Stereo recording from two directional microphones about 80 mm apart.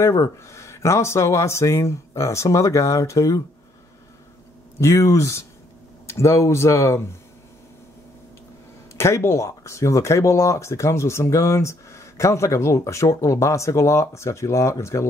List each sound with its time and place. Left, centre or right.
0.0 s speech: left
4.7 s speech: left
8.9 s speech: left